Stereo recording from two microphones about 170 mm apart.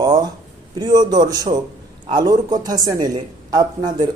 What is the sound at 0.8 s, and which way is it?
A man's voice, 25° right (ahead or behind).